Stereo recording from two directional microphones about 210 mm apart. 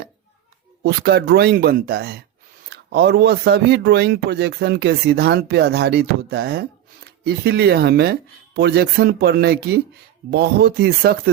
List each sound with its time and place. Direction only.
0.8 s speech: 50° right (ahead or behind)